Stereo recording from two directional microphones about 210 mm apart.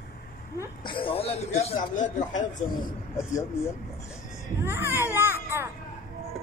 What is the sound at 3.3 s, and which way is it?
Speech, 15° left (ahead or behind).